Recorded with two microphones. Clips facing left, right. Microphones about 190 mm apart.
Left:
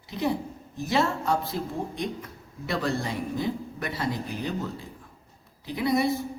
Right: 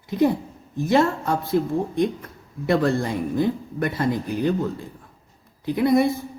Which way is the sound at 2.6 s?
55° right (ahead or behind).